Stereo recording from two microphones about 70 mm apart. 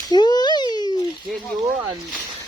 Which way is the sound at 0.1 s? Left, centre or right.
Left.